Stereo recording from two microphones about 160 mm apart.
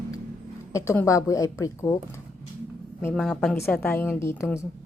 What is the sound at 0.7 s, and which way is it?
A woman's voice, 20° left (ahead or behind).